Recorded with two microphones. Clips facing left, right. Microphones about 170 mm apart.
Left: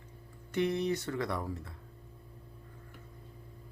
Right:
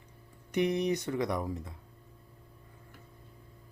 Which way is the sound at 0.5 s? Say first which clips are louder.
Right 2 dB; 15° right (ahead or behind).